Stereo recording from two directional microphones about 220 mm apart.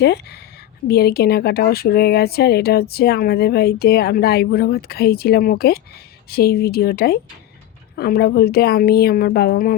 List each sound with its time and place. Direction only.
0.0 s speech: 50° left (ahead or behind)